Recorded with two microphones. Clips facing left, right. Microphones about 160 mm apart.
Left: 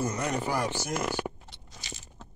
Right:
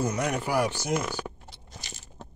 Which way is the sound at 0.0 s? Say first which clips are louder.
Right 2 dB; 10° right (ahead or behind).